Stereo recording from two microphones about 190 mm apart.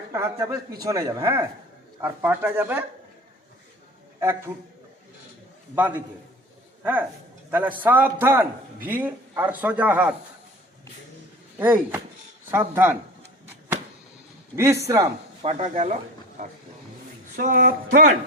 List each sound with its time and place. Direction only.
0.1 s a man's voice: 15° right (ahead or behind)
4.2 s a man's voice: 15° right (ahead or behind)
5.7 s a man's voice: 10° right (ahead or behind)
7.5 s a man's voice: 10° right (ahead or behind)
11.6 s a man's voice: 10° right (ahead or behind)
14.5 s a man's voice: 15° right (ahead or behind)
15.4 s speech: 35° right (ahead or behind)
17.3 s speech: 45° right (ahead or behind)